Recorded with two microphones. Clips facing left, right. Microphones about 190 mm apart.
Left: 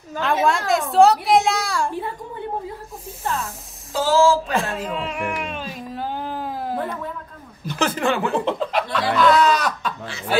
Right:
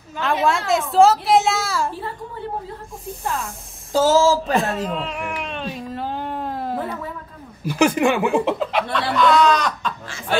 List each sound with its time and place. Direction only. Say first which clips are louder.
0.2 s speech: even; centre (ahead or behind)
3.3 s speech: left 1 dB; centre (ahead or behind)
3.9 s speech: right 1 dB; 40° right (ahead or behind)
4.9 s baby cry: left 1 dB; 5° left (ahead or behind)
7.6 s speech: right 5 dB; 15° right (ahead or behind); by 9.9 s 5° left (ahead or behind)